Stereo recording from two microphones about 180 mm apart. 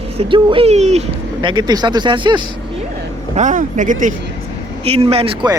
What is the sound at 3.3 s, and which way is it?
Speech, 45° right (ahead or behind).